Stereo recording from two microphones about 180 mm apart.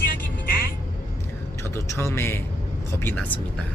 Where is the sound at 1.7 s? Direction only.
15° left (ahead or behind).